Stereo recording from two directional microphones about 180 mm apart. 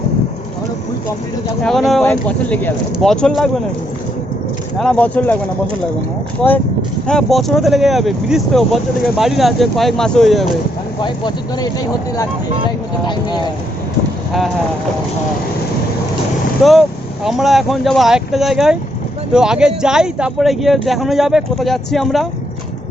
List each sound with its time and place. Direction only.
1.6 s speech: centre (ahead or behind)
4.8 s speech: 5° left (ahead or behind)
6.4 s speech: 5° left (ahead or behind)
11.0 s speech: 25° left (ahead or behind)
13.1 s speech: 25° left (ahead or behind)
16.6 s speech: centre (ahead or behind)